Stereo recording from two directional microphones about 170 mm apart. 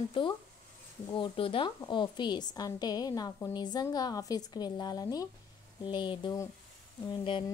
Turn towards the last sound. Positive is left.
turn(degrees=30)  # may be behind; listen again after turning